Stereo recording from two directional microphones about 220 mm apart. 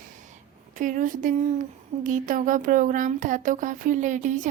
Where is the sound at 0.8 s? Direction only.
35° right (ahead or behind).